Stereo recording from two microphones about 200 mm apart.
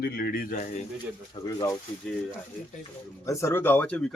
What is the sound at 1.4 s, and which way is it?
Speech, 25° left (ahead or behind).